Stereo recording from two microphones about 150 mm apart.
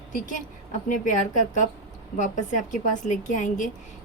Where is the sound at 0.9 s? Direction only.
60° left (ahead or behind).